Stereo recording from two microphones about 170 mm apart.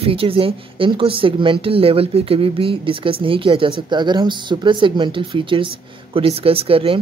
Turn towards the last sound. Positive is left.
turn(degrees=-35)  # may be behind; listen again after turning